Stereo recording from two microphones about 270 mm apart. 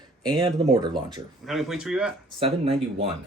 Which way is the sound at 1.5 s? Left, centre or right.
Centre.